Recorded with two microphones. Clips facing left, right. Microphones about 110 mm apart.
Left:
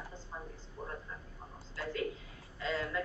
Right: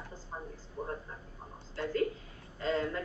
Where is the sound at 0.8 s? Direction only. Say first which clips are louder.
Right 6 dB; 20° right (ahead or behind).